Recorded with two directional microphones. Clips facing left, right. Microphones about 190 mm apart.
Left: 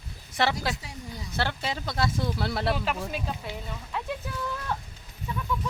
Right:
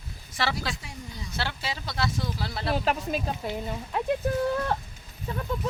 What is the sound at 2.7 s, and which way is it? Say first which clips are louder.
Speech: right 4 dB; 40° right (ahead or behind).